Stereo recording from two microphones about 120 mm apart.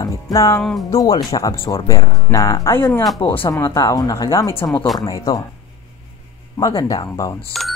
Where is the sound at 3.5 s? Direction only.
25° left (ahead or behind).